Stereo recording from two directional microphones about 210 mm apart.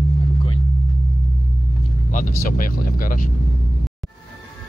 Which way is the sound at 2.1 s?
40° left (ahead or behind).